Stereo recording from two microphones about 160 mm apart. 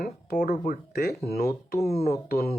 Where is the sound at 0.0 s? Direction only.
80° left.